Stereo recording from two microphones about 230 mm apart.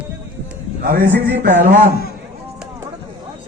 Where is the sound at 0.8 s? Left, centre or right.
Right.